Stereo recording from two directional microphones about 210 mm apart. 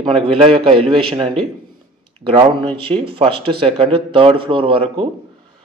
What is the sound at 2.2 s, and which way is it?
Speech, 25° right (ahead or behind).